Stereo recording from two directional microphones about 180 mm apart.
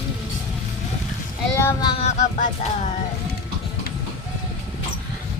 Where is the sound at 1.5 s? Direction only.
15° left (ahead or behind).